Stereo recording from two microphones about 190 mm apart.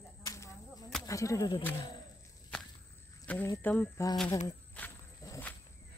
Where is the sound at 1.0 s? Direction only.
15° left (ahead or behind).